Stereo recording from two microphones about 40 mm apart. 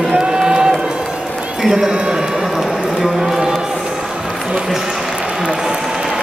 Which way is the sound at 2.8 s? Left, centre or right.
Centre.